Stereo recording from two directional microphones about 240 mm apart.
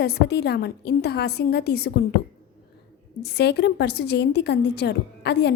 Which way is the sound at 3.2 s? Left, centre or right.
Left.